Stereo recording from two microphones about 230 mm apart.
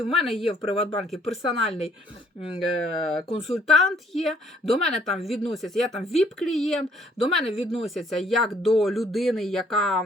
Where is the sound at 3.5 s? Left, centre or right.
Centre.